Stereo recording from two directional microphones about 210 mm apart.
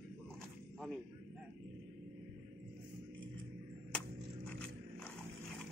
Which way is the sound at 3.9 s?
5° left (ahead or behind).